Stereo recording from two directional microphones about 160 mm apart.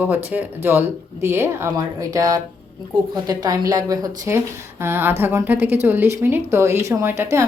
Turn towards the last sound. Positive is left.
turn(degrees=-15)  # may be behind; listen again after turning